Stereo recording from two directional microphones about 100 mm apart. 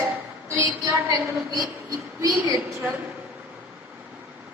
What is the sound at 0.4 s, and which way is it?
A woman's voice, 30° right (ahead or behind).